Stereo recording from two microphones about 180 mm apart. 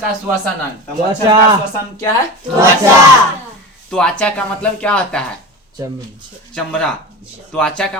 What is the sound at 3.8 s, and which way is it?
Speech, 5° left (ahead or behind).